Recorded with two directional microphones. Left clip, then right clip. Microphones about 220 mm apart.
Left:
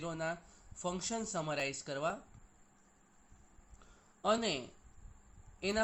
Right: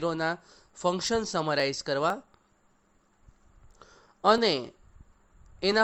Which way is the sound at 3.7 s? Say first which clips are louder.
Right 12 dB; 50° right (ahead or behind).